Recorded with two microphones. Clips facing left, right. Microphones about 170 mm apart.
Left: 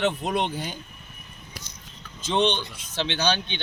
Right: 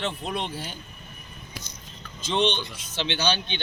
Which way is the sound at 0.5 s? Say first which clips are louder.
Left 3 dB; 15° left (ahead or behind).